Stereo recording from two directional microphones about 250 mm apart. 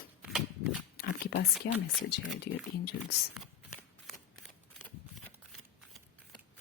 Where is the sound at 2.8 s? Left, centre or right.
Left.